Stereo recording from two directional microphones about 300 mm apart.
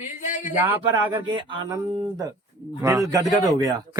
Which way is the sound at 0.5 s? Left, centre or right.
Centre.